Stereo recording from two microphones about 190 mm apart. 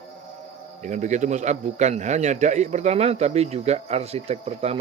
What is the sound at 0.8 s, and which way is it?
A man's voice, 40° right (ahead or behind).